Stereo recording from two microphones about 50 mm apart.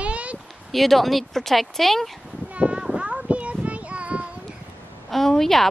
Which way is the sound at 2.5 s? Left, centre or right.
Right.